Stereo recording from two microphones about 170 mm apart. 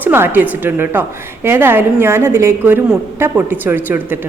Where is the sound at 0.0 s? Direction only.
15° right (ahead or behind).